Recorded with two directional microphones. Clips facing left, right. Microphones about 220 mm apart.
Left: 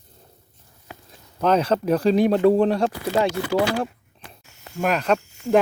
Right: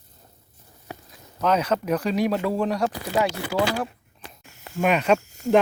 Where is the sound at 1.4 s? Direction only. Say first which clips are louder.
Left 3 dB; 30° left (ahead or behind).